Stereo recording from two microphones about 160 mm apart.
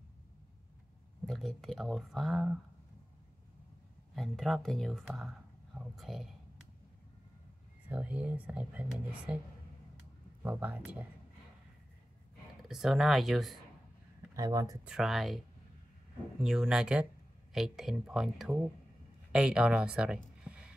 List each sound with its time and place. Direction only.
1.2 s speech: centre (ahead or behind)
4.1 s speech: centre (ahead or behind)
7.9 s speech: 10° right (ahead or behind)
10.4 s speech: 10° right (ahead or behind)
12.6 s speech: centre (ahead or behind)
14.3 s speech: 25° right (ahead or behind)
14.9 s speech: centre (ahead or behind)
16.4 s speech: 5° right (ahead or behind)